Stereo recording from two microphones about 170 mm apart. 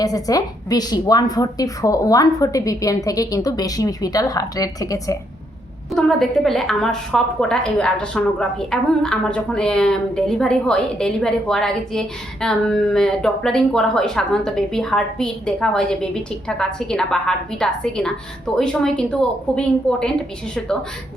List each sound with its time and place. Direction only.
0.0 s a woman's voice: 20° left (ahead or behind)
5.9 s a woman's voice: centre (ahead or behind)